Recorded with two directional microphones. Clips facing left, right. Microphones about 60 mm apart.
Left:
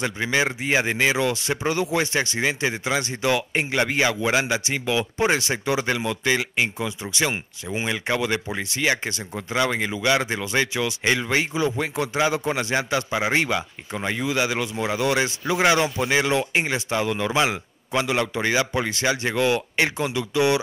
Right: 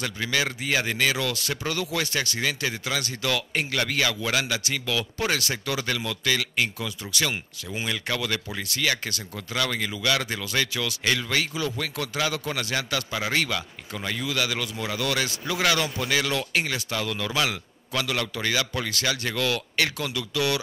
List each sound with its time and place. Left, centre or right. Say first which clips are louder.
0.0 s speech: left 4 dB; left